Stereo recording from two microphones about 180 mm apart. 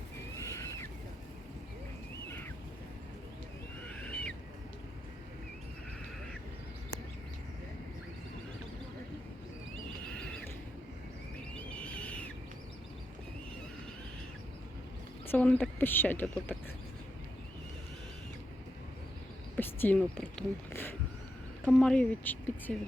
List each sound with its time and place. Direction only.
0.3 s a sound: 15° left (ahead or behind)
3.8 s owl: 5° left (ahead or behind)
11.7 s owl: 5° left (ahead or behind)
15.3 s speech: 10° left (ahead or behind)
19.5 s speech: 10° left (ahead or behind)